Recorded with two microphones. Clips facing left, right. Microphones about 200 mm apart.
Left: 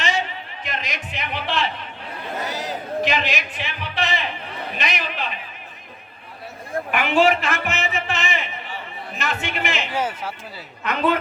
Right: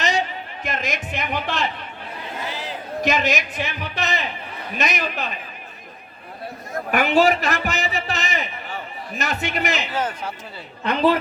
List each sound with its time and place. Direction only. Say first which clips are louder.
0.6 s speech: right 4 dB; 45° right (ahead or behind)
2.5 s a man's voice: left 3 dB; 40° left (ahead or behind)
3.0 s a man's voice: right 4 dB; 45° right (ahead or behind)
6.9 s a man's voice: right 1 dB; 40° right (ahead or behind)
9.9 s speech: even; 10° left (ahead or behind)
10.8 s a man's voice: right 3 dB; 35° right (ahead or behind)